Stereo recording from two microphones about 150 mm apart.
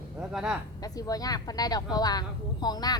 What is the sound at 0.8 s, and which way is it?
Speech, 25° left (ahead or behind).